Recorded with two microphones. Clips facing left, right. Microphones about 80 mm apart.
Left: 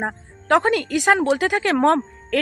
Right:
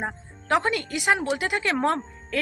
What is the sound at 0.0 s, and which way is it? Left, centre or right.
A woman's voice, left.